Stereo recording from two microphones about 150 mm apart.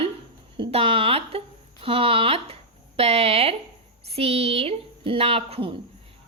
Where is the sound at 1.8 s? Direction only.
35° right (ahead or behind).